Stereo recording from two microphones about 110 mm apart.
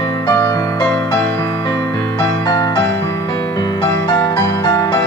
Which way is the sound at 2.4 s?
35° left (ahead or behind).